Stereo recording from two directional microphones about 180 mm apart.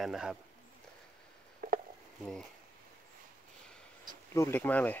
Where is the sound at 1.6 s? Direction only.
50° right (ahead or behind).